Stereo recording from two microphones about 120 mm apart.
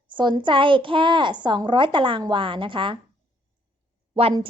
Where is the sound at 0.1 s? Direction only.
40° right (ahead or behind).